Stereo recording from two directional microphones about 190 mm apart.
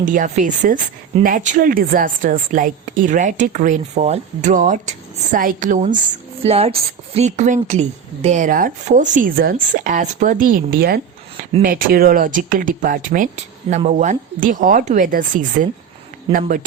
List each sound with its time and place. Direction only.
0.0 s speech: 40° right (ahead or behind)
6.4 s a woman's voice: 30° right (ahead or behind)